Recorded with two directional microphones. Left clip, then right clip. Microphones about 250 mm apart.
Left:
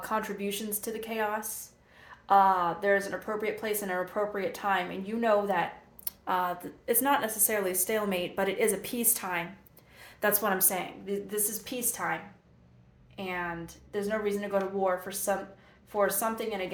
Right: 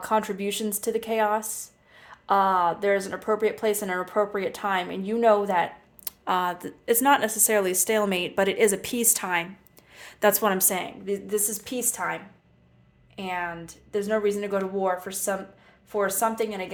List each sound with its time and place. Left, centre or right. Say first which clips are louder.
0.0 s speech: right 7 dB; right